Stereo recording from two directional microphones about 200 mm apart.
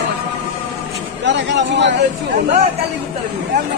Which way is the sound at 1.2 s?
60° right (ahead or behind).